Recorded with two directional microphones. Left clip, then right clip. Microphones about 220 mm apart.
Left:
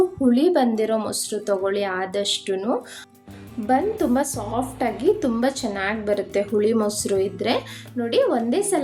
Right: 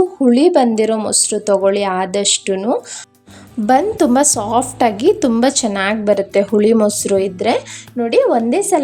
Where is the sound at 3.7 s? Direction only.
45° right (ahead or behind).